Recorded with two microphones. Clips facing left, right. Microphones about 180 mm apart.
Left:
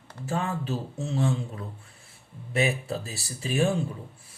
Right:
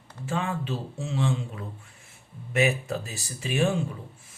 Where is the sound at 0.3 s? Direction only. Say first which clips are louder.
Even; 40° left (ahead or behind).